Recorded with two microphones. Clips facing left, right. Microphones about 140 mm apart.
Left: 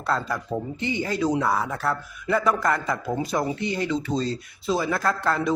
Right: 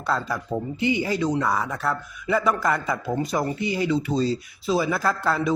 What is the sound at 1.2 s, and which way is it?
A man's voice, centre (ahead or behind).